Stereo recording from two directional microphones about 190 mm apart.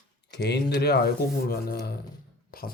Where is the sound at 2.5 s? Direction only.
50° left (ahead or behind).